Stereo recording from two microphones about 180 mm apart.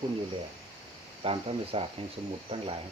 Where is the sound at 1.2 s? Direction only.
30° right (ahead or behind).